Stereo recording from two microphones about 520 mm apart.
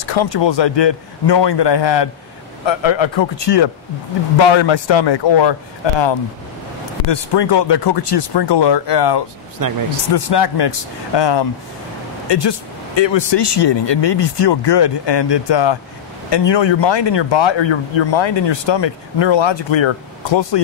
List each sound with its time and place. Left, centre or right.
0.0 s a man's voice: left
9.6 s speech: right
10.1 s a man's voice: left